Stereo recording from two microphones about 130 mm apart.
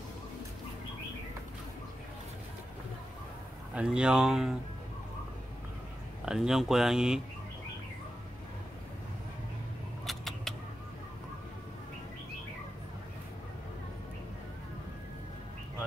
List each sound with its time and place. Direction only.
3.7 s speech: 5° right (ahead or behind)
6.2 s speech: 5° right (ahead or behind)
10.0 s vehicle: centre (ahead or behind)